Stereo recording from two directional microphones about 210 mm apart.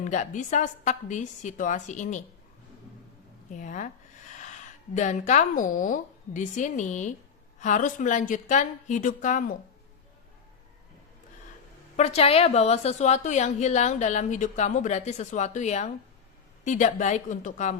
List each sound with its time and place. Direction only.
0.0 s a woman's voice: 35° left (ahead or behind)
3.5 s a woman's voice: 35° left (ahead or behind)
11.9 s a woman's voice: 30° left (ahead or behind)